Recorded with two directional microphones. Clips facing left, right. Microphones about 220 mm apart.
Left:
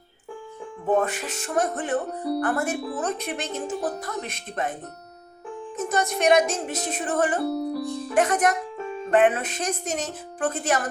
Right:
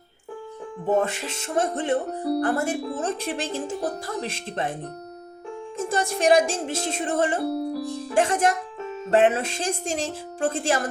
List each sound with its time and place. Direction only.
0.9 s a woman's voice: 25° right (ahead or behind)
5.7 s music: 30° right (ahead or behind)
7.5 s music: 5° right (ahead or behind)
8.1 s a woman's voice: 30° right (ahead or behind)